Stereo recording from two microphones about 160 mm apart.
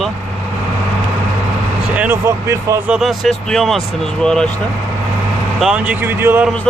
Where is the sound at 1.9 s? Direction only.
15° right (ahead or behind).